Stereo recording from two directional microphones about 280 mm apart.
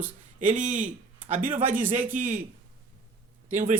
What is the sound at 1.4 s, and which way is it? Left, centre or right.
Speech, right.